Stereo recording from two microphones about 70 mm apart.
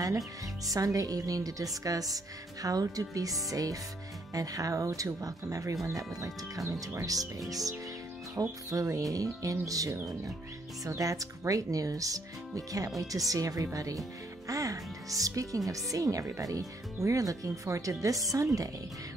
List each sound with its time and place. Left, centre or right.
0.7 s speech: right